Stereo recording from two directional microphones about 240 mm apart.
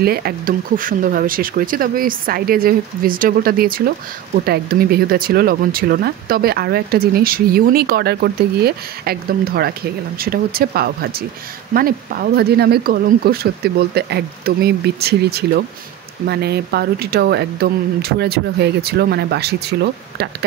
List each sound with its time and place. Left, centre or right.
0.0 s speech: right